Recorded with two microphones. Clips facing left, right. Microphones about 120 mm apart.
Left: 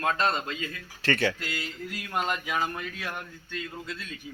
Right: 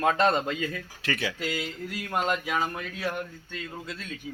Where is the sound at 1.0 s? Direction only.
5° right (ahead or behind).